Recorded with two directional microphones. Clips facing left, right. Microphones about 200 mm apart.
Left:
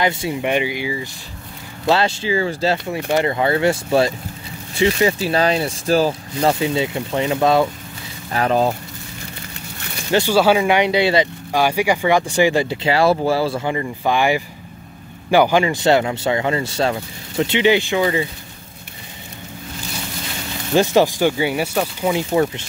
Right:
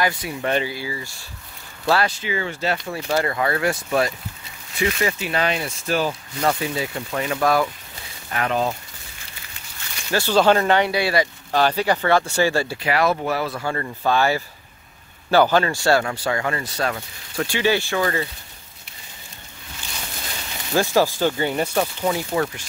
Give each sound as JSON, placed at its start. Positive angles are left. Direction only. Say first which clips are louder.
{"t": 0.0, "sound": "speech", "louder": "left 4 dB", "side_deg": 25}
{"t": 8.3, "sound": "speech", "louder": "left 5 dB", "side_deg": 35}
{"t": 10.1, "sound": "speech", "louder": "left 2 dB", "side_deg": 10}
{"t": 11.5, "sound": "speech", "louder": "left 2 dB", "side_deg": 10}
{"t": 13.7, "sound": "speech", "louder": "left 2 dB", "side_deg": 15}
{"t": 20.7, "sound": "speech", "louder": "left 4 dB", "side_deg": 20}
{"t": 22.1, "sound": "speech", "louder": "left 5 dB", "side_deg": 20}